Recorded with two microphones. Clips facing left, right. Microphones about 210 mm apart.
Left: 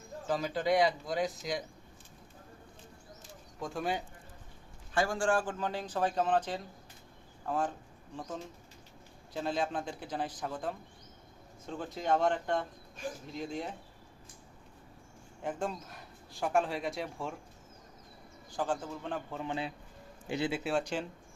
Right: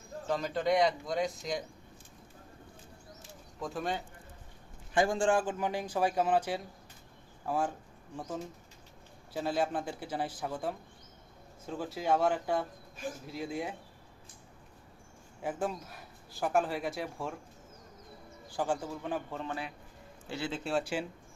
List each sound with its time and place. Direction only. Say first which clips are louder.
0.3 s speech: even; centre (ahead or behind)
3.6 s speech: even; centre (ahead or behind)
4.9 s a man's voice: right 2 dB; 20° right (ahead or behind)
9.3 s a man's voice: right 2 dB; 5° right (ahead or behind)
15.4 s speech: right 1 dB; 5° right (ahead or behind)
18.5 s a man's voice: right 1 dB; 10° right (ahead or behind)
19.4 s a man's voice: left 2 dB; 20° left (ahead or behind)
20.7 s a man's voice: even; 5° right (ahead or behind)